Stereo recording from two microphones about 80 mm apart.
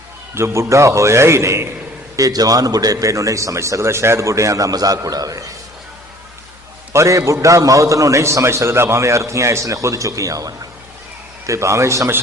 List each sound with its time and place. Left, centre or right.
0.3 s a man's voice: right
2.1 s a man's voice: right
6.9 s a man's voice: right